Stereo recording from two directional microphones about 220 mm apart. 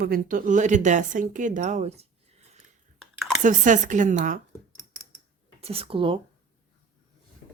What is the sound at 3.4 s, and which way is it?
Speech, 35° right (ahead or behind).